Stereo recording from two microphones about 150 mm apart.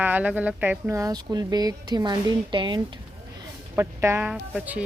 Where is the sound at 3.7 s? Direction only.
15° right (ahead or behind).